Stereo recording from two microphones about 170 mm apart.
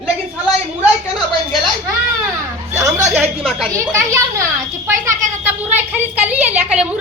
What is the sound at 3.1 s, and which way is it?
Speech, 5° right (ahead or behind).